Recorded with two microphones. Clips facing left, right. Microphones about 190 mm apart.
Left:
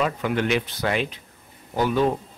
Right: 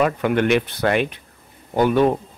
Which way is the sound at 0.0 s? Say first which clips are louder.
Right 5 dB; 55° right (ahead or behind).